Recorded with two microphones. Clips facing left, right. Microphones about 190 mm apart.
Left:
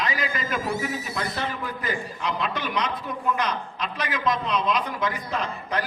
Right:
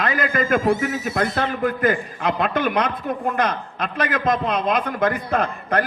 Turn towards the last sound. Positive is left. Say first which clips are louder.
# right 7 dB
turn(degrees=-55)  # may be behind; listen again after turning